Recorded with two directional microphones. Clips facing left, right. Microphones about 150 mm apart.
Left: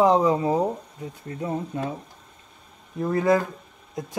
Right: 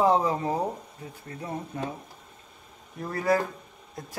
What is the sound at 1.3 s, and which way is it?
Speech, 30° left (ahead or behind).